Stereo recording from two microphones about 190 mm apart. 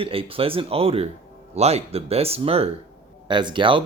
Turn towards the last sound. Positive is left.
turn(degrees=-25)  # may be behind; listen again after turning